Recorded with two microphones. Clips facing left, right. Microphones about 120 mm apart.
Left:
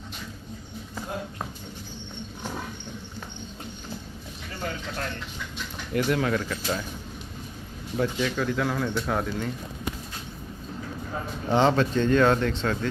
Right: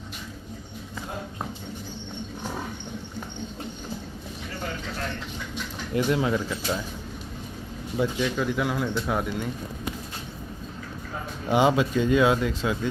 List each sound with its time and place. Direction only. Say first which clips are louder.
5.9 s speech: right 1 dB; 20° right (ahead or behind)
7.9 s speech: right 1 dB; 10° right (ahead or behind)
11.4 s speech: even; 10° right (ahead or behind)